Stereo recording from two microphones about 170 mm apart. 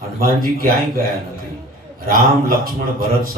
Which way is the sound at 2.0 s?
55° right (ahead or behind).